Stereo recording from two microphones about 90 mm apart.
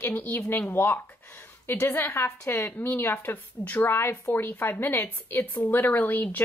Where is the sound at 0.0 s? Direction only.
20° left (ahead or behind).